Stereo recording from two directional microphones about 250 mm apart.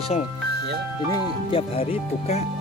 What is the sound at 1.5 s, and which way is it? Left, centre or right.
Speech, left.